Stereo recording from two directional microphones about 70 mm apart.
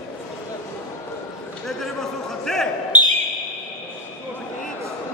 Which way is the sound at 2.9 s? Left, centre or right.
Right.